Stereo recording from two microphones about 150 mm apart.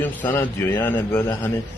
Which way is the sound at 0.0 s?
15° left (ahead or behind).